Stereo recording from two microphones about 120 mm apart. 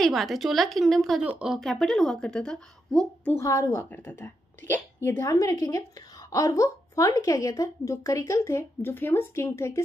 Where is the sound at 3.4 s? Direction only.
25° left (ahead or behind).